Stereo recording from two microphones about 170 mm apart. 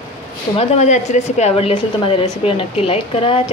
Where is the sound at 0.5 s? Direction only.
45° left (ahead or behind).